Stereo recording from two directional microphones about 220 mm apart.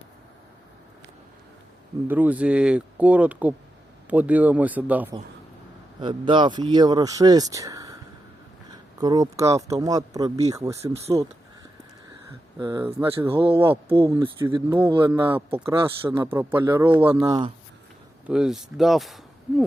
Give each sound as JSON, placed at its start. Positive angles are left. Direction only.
{"t": 2.0, "sound": "speech", "side_deg": -5}
{"t": 6.0, "sound": "speech", "side_deg": -20}
{"t": 12.5, "sound": "speech", "side_deg": -20}
{"t": 16.0, "sound": "speech", "side_deg": -10}
{"t": 18.3, "sound": "speech", "side_deg": -5}